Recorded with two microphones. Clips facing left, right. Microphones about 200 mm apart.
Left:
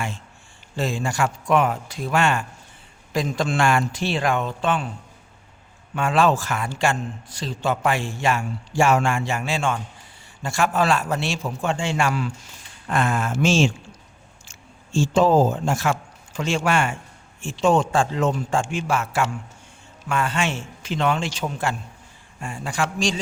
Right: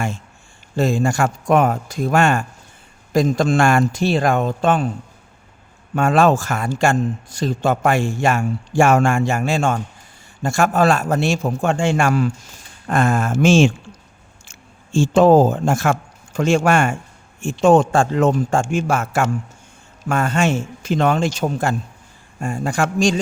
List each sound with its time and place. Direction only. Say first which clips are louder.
0.8 s a man's voice: right 6 dB; 45° right (ahead or behind)
5.9 s a man's voice: right 5 dB; 45° right (ahead or behind)
14.9 s a man's voice: right 5 dB; 55° right (ahead or behind)